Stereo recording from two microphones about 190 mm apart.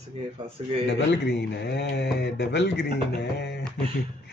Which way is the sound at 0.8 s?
65° left (ahead or behind).